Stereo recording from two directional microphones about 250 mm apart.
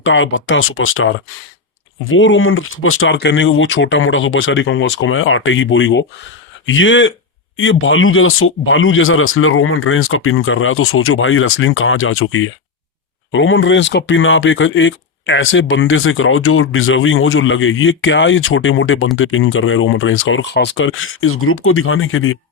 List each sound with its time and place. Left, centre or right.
0.0 s speech: left